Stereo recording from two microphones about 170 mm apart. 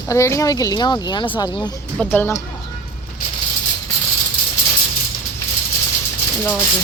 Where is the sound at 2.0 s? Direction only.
10° left (ahead or behind).